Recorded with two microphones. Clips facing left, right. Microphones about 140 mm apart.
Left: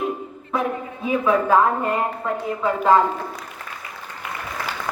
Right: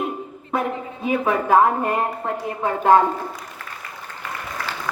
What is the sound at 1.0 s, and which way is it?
A woman's voice, 65° right (ahead or behind).